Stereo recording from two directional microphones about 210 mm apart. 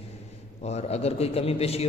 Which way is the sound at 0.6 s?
30° left (ahead or behind).